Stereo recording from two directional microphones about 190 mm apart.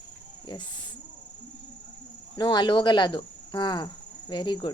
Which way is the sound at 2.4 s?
25° left (ahead or behind).